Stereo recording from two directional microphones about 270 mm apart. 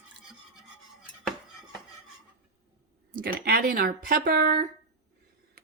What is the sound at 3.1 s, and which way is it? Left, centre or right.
Speech, right.